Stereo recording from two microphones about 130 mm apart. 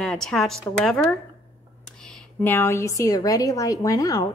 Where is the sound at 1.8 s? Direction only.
5° left (ahead or behind).